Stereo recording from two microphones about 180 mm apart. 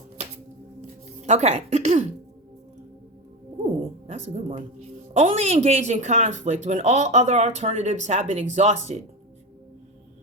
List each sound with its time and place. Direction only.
1.2 s speech: 40° right (ahead or behind)
4.0 s speech: 35° right (ahead or behind)